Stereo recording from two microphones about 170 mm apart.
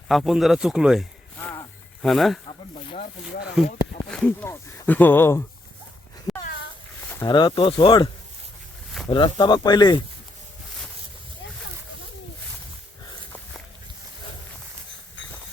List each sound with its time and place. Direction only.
0.1 s speech: centre (ahead or behind)
1.4 s a sound: 15° left (ahead or behind)
2.0 s speech: centre (ahead or behind)
4.1 s speech: 10° left (ahead or behind)
6.3 s dog: centre (ahead or behind)
7.3 s speech: 25° left (ahead or behind)